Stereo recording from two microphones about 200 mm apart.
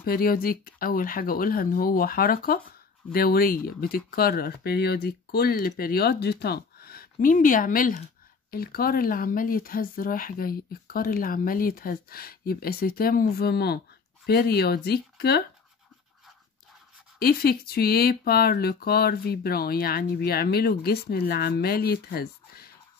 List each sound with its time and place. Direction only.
0.0 s speech: 45° left (ahead or behind)
17.2 s speech: 50° left (ahead or behind)